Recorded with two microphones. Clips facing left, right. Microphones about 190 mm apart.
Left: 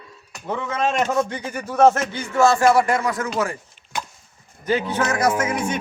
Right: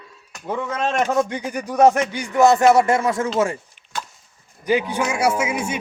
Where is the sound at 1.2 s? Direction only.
15° right (ahead or behind).